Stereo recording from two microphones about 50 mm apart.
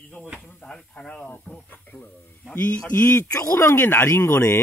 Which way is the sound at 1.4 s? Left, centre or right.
Left.